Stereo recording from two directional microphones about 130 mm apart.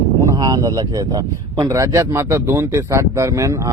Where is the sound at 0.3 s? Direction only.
30° right (ahead or behind).